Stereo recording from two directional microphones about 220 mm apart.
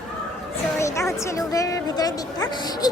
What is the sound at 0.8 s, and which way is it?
A woman's voice, 15° left (ahead or behind).